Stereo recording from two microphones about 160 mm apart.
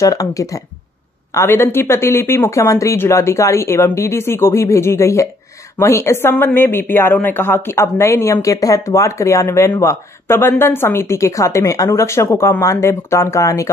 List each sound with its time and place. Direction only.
0.0 s speech: 20° left (ahead or behind)